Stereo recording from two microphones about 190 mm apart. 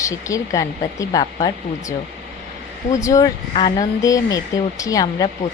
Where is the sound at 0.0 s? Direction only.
15° left (ahead or behind).